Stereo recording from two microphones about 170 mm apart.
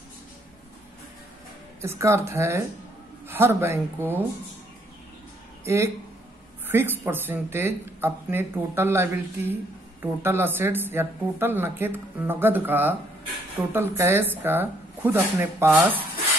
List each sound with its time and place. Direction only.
1.8 s speech: 15° right (ahead or behind)
6.7 s speech: 10° right (ahead or behind)